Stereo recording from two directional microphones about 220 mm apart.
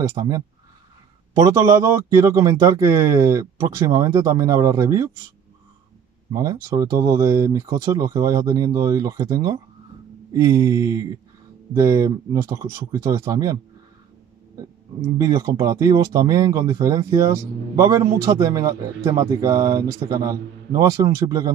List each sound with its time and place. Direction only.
0.1 s a man's voice: 15° right (ahead or behind)
6.3 s a man's voice: 15° right (ahead or behind)
15.1 s a man's voice: 15° right (ahead or behind)